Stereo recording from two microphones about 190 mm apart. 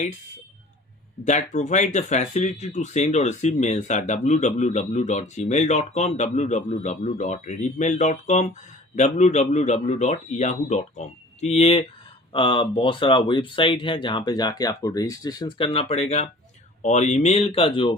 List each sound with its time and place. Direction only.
1.2 s speech: 40° left (ahead or behind)